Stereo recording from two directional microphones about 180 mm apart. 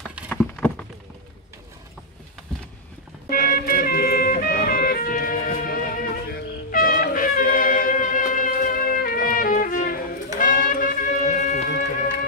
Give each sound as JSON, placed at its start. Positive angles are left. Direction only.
{"t": 0.3, "sound": "clip-clop", "side_deg": 5}
{"t": 3.3, "sound": "music", "side_deg": 55}